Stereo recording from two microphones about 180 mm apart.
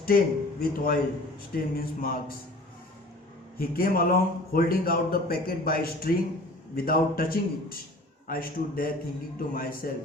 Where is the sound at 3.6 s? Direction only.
55° left (ahead or behind).